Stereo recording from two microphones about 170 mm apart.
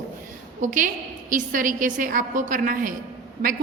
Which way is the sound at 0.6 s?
50° right (ahead or behind).